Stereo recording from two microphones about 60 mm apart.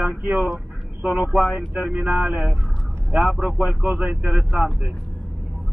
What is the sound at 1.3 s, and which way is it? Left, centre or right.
Speech, centre.